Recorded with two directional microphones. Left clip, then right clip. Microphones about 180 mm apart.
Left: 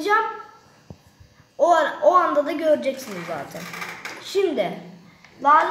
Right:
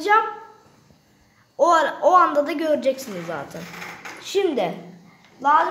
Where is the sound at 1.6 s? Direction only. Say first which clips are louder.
Right 1 dB; 55° right (ahead or behind).